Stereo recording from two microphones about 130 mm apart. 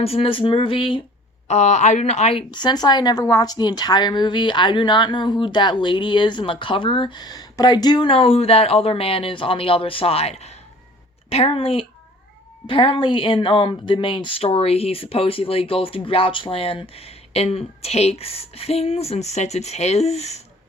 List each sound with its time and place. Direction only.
0.0 s speech: 50° left (ahead or behind)
1.5 s speech: 60° left (ahead or behind)
2.5 s a woman's voice: 35° left (ahead or behind); by 20.4 s 55° left (ahead or behind)